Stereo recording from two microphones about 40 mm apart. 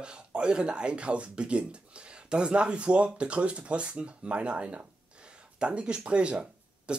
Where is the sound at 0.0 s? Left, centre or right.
Right.